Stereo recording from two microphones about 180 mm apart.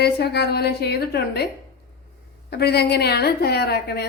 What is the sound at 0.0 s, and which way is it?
A woman's voice, 65° left (ahead or behind).